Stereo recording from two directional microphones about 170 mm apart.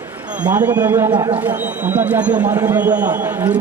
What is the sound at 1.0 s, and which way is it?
Speech, 25° right (ahead or behind).